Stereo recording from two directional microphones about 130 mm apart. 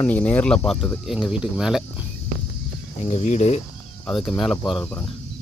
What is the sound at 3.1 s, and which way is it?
Speech, 60° left (ahead or behind).